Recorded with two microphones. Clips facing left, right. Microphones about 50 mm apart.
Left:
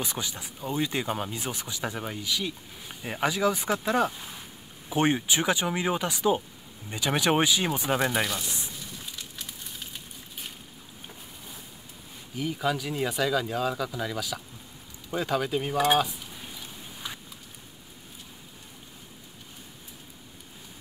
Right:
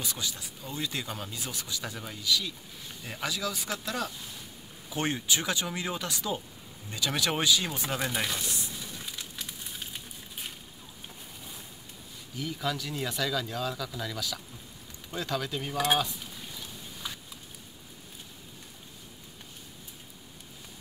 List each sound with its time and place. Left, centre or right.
0.0 s speech: left
12.4 s speech: centre